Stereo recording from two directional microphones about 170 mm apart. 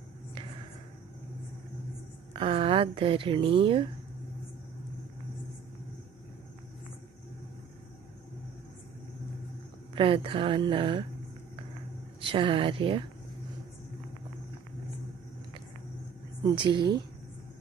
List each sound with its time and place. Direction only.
2.3 s speech: 30° right (ahead or behind)
9.9 s speech: 30° right (ahead or behind)
12.2 s speech: 30° right (ahead or behind)
16.4 s a woman's voice: 25° right (ahead or behind)